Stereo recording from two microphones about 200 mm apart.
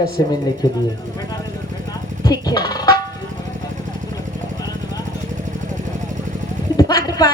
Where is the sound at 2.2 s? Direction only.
20° left (ahead or behind).